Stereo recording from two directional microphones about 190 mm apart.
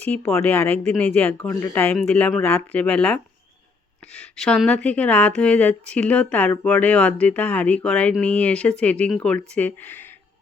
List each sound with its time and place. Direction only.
0.0 s speech: 10° left (ahead or behind)